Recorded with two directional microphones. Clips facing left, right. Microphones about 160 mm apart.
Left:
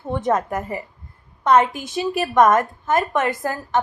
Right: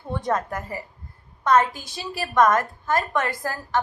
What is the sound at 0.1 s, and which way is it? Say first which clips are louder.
Speech: left 5 dB; 20° left (ahead or behind).